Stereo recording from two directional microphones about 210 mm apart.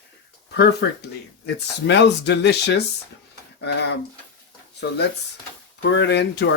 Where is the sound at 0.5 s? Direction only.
50° left (ahead or behind).